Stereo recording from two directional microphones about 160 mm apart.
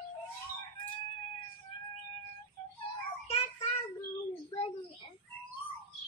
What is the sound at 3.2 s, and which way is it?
Child singing, 40° left (ahead or behind).